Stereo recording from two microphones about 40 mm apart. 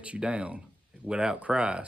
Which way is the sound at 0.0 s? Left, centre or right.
Right.